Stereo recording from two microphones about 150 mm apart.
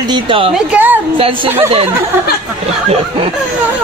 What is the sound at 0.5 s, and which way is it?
A woman's voice, 10° right (ahead or behind).